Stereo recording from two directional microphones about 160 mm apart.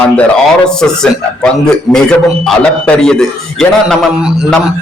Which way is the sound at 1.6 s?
5° left (ahead or behind).